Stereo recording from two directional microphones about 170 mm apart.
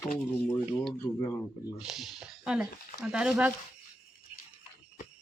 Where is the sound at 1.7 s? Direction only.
Centre (ahead or behind).